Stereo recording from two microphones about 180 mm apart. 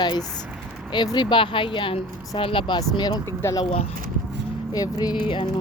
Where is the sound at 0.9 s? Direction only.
25° left (ahead or behind).